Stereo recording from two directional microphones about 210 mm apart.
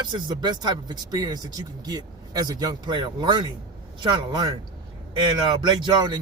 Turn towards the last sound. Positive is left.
turn(degrees=-20)  # may be behind; listen again after turning